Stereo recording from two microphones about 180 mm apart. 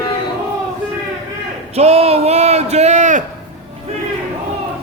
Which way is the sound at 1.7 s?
35° right (ahead or behind).